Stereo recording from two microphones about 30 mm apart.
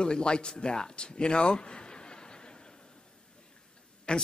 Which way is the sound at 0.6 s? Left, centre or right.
Left.